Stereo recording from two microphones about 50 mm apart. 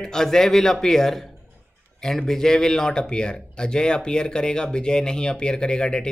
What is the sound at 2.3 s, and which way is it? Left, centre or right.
Speech, centre.